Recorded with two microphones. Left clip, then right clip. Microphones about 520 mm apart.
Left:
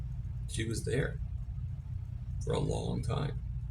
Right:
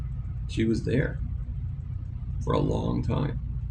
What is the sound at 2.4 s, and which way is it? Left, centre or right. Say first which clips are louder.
Speech: right 7 dB; left.